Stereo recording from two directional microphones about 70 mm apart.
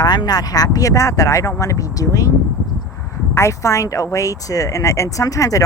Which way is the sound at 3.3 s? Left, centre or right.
Left.